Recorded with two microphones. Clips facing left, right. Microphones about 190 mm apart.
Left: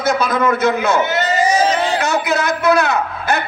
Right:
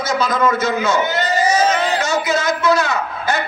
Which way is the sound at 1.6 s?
30° left (ahead or behind).